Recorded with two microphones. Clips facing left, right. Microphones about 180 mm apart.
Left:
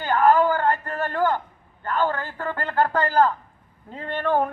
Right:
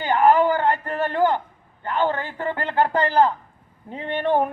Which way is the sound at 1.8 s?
20° right (ahead or behind).